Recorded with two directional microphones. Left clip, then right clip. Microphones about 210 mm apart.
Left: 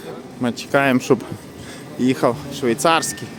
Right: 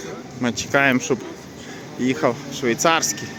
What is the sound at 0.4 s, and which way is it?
Speech, 10° left (ahead or behind).